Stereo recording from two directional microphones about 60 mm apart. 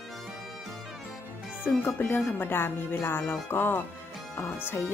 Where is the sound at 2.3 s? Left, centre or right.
Left.